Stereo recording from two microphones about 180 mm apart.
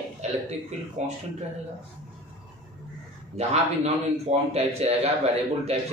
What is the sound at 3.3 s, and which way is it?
A man's voice, 35° right (ahead or behind).